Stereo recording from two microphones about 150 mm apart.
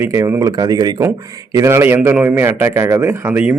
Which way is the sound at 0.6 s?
25° right (ahead or behind).